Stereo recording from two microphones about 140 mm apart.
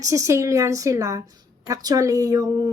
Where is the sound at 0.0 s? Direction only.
20° right (ahead or behind).